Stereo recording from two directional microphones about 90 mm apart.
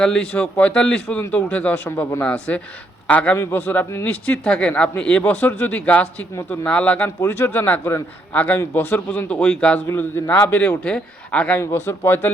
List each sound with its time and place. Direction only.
0.0 s a man's voice: 10° left (ahead or behind)
3.3 s a man's voice: 25° left (ahead or behind)
7.2 s a man's voice: 25° left (ahead or behind)
9.8 s a man's voice: 30° left (ahead or behind)
11.6 s a man's voice: 30° left (ahead or behind)